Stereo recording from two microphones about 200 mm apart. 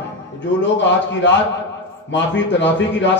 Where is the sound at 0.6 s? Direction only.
65° left (ahead or behind).